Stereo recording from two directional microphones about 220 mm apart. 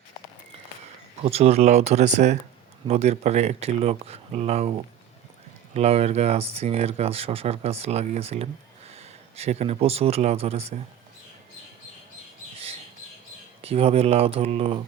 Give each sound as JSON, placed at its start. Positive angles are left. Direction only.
{"t": 1.2, "sound": "speech", "side_deg": -30}
{"t": 5.7, "sound": "speech", "side_deg": -30}
{"t": 13.6, "sound": "speech", "side_deg": -25}